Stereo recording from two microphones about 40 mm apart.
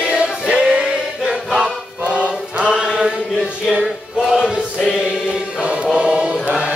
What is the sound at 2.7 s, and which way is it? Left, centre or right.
Mantra, centre.